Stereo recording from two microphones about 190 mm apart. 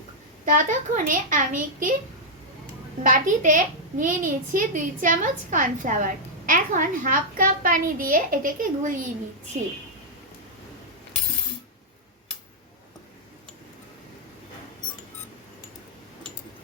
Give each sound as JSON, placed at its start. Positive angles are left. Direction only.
{"t": 0.4, "sound": "a woman's voice", "side_deg": -45}
{"t": 3.0, "sound": "a woman's voice", "side_deg": -45}